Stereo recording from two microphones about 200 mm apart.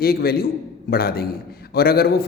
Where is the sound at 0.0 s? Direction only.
50° left (ahead or behind).